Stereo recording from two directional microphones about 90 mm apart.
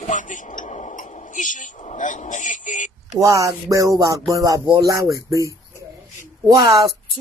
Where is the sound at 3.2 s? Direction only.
35° right (ahead or behind).